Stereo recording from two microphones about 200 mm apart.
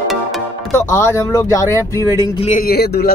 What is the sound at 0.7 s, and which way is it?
Speech, 15° left (ahead or behind).